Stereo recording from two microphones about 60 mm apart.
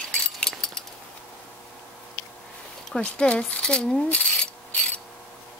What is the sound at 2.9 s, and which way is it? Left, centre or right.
Speech, centre.